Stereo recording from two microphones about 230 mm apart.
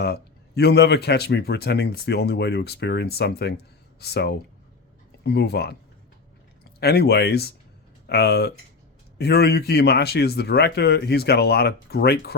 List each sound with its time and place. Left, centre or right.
0.0 s speech: left
6.7 s speech: left